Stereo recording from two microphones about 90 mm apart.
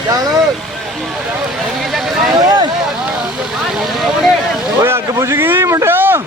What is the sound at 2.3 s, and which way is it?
Speech, 45° right (ahead or behind).